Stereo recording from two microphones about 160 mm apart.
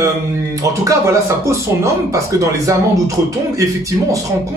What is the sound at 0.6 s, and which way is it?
Speech, 20° right (ahead or behind).